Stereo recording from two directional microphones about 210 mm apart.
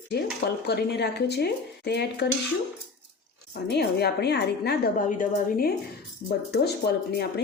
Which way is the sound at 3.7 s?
50° left (ahead or behind).